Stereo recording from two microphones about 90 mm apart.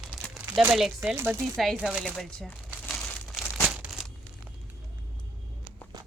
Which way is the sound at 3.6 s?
10° right (ahead or behind).